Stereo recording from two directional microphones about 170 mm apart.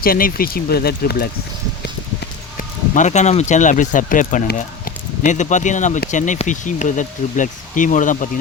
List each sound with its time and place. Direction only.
0.0 s speech: 60° left (ahead or behind)
2.9 s speech: 45° left (ahead or behind)